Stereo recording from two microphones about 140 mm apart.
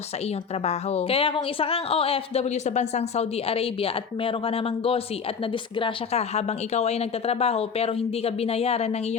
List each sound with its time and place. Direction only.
0.6 s a woman's voice: 50° left (ahead or behind)